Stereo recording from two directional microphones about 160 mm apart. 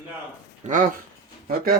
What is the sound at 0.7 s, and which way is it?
Speech, 55° right (ahead or behind).